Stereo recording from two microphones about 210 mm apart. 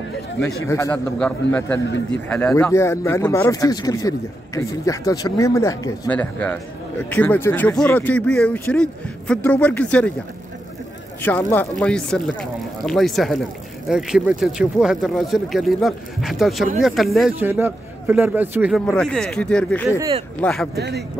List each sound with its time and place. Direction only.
0.7 s speech: 15° left (ahead or behind)
11.2 s a man's voice: 10° left (ahead or behind)
20.7 s speech: 50° right (ahead or behind)